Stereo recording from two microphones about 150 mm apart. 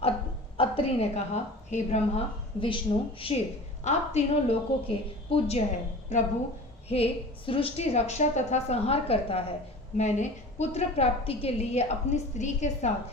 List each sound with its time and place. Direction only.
0.5 s a woman's voice: 40° left (ahead or behind)
6.8 s a woman's voice: 40° left (ahead or behind)